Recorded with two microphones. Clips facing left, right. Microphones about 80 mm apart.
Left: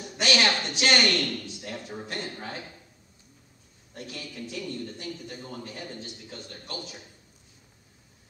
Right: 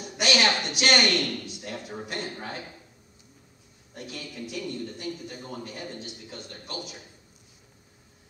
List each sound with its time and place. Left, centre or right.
0.0 s a woman's voice: centre
3.9 s a man's voice: centre